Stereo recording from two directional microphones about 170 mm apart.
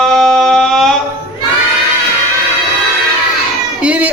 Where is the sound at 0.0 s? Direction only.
5° left (ahead or behind).